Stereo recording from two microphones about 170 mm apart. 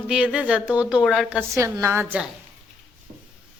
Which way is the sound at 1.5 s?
15° right (ahead or behind).